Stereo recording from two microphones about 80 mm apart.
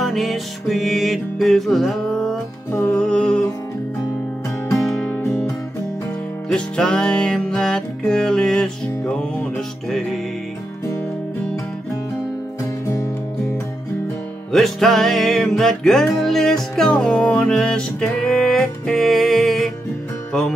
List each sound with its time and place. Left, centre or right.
0.0 s music: centre
4.6 s music: left
5.0 s music: left
6.5 s music: centre
14.5 s music: centre